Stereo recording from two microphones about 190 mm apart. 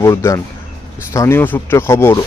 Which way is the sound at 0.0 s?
15° left (ahead or behind).